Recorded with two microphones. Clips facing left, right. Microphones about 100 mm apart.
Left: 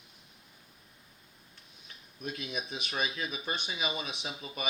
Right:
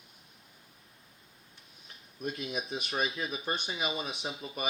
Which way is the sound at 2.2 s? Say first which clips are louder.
Right 2 dB; 35° right (ahead or behind).